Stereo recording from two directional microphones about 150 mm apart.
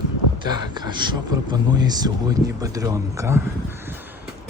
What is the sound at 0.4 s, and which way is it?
Speech, 30° right (ahead or behind).